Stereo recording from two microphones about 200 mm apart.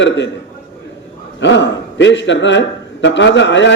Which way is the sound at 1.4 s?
65° left (ahead or behind).